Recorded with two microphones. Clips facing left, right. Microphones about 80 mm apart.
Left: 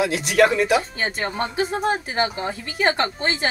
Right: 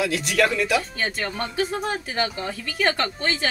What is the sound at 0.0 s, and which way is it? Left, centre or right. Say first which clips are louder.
A woman's voice: left 4 dB; centre.